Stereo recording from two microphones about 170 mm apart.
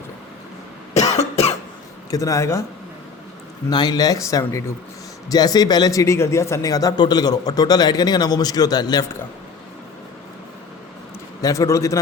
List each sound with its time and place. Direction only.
1.1 s cough: 40° left (ahead or behind)
2.0 s speech: 20° left (ahead or behind)
3.7 s speech: 25° left (ahead or behind)
11.4 s a man's voice: 20° left (ahead or behind)